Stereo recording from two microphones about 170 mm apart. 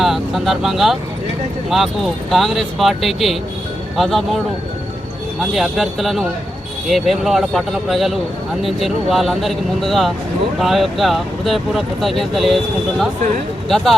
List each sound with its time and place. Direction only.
0.0 s speech: centre (ahead or behind)
5.4 s speech: centre (ahead or behind)
13.7 s speech: centre (ahead or behind)